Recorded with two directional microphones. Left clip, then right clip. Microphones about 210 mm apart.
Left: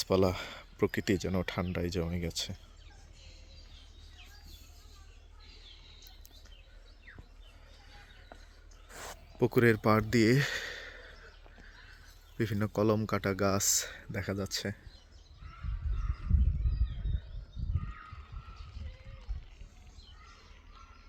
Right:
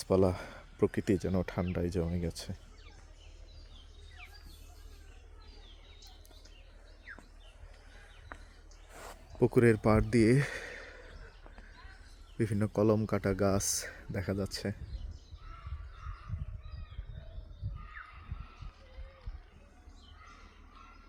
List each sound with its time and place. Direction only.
0.0 s speech: 5° right (ahead or behind)
8.9 s a sound: 20° left (ahead or behind)
9.4 s speech: 10° right (ahead or behind)
12.4 s speech: 5° right (ahead or behind)